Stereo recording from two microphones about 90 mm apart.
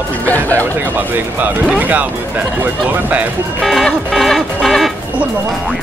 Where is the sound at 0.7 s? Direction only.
20° right (ahead or behind).